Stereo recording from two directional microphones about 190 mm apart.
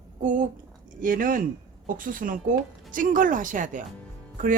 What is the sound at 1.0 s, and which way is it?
Speech, 45° right (ahead or behind).